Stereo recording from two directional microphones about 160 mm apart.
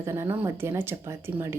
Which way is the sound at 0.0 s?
15° right (ahead or behind).